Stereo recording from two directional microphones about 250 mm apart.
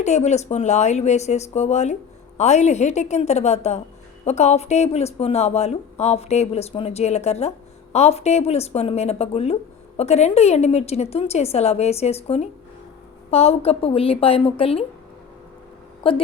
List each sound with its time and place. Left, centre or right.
0.0 s speech: left
16.0 s speech: left